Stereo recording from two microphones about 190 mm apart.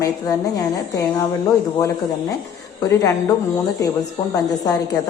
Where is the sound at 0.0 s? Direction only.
20° left (ahead or behind).